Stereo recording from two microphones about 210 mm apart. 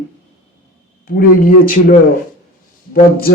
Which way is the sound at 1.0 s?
45° left (ahead or behind).